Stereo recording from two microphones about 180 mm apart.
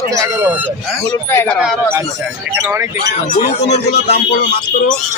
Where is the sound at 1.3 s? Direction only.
15° left (ahead or behind).